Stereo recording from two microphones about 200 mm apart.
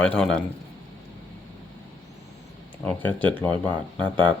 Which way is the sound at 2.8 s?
10° left (ahead or behind).